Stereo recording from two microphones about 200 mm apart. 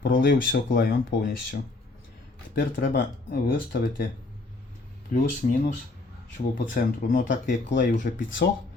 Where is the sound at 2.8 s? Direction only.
45° left (ahead or behind).